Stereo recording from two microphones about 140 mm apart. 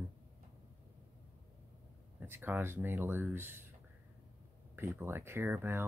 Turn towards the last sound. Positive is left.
turn(degrees=-15)  # may be behind; listen again after turning